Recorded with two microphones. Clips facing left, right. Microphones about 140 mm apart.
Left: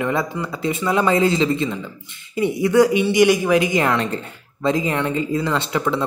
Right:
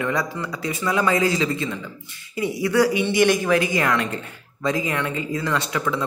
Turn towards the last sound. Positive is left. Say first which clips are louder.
# left 3 dB
turn(degrees=25)  # may be behind; listen again after turning